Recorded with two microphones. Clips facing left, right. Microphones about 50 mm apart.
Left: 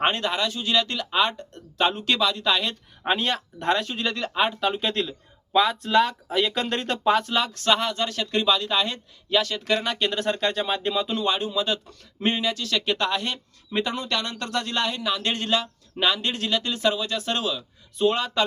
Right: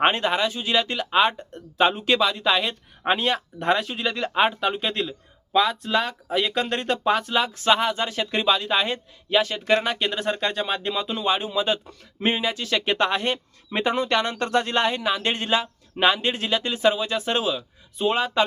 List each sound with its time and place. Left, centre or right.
0.0 s speech: centre
4.3 s speech: right
4.6 s speech: centre